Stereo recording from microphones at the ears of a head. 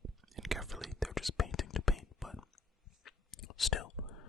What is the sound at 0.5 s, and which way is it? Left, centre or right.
Whispering, centre.